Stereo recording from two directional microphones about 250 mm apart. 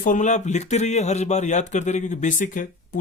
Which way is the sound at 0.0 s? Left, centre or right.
Left.